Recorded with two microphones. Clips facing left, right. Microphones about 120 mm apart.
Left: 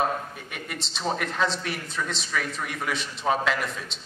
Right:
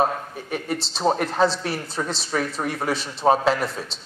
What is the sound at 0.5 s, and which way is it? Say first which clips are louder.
A man's voice: right 9 dB; 35° right (ahead or behind).